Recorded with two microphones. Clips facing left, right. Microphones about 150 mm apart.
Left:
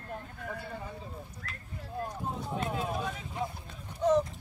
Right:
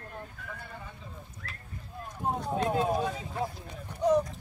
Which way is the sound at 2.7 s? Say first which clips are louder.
Right 6 dB; 35° right (ahead or behind).